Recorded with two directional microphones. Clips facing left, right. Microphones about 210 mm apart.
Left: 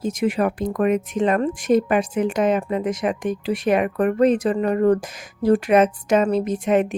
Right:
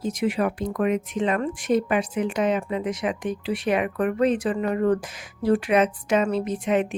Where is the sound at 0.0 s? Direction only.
45° left (ahead or behind).